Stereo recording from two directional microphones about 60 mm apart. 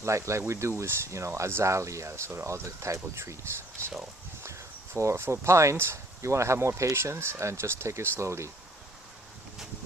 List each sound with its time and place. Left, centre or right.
0.0 s speech: right
4.9 s speech: right